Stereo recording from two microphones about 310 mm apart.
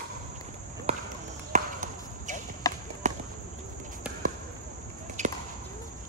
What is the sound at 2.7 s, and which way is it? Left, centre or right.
Horse, centre.